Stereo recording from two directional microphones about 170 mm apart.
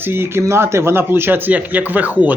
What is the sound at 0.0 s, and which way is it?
Speech, 15° right (ahead or behind).